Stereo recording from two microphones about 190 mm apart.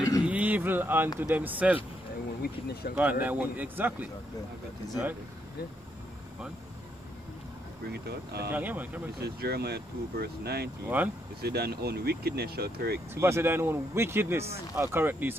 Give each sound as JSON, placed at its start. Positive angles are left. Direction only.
{"t": 0.2, "sound": "a sound", "side_deg": -10}
{"t": 1.3, "sound": "speech", "side_deg": -10}
{"t": 2.4, "sound": "speech", "side_deg": 55}
{"t": 3.0, "sound": "speech", "side_deg": -10}
{"t": 7.9, "sound": "speech", "side_deg": -55}
{"t": 8.5, "sound": "speech", "side_deg": -10}
{"t": 9.2, "sound": "speech", "side_deg": -55}
{"t": 11.0, "sound": "speech", "side_deg": -10}
{"t": 11.4, "sound": "speech", "side_deg": -55}
{"t": 13.1, "sound": "speech", "side_deg": -15}